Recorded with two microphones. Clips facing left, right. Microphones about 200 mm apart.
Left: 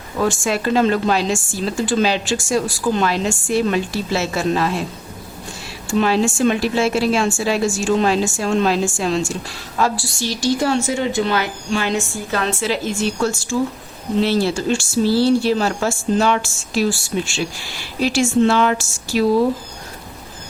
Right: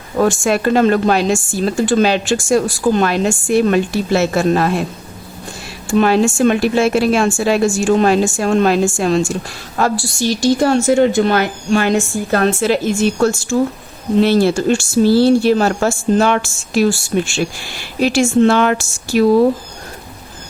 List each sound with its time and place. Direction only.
0.2 s a woman's voice: 55° right (ahead or behind)
5.9 s a woman's voice: 55° right (ahead or behind)